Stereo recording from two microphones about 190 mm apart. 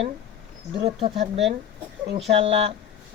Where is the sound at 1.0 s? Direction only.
35° right (ahead or behind).